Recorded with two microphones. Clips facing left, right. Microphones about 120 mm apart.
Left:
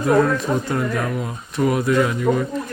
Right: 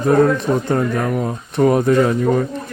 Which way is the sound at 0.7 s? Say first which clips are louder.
Right 4 dB; 25° right (ahead or behind).